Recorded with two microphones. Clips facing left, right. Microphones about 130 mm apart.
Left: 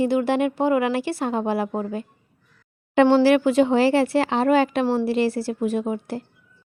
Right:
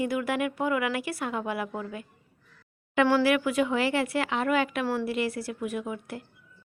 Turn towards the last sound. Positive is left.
turn(degrees=30)  # may be behind; listen again after turning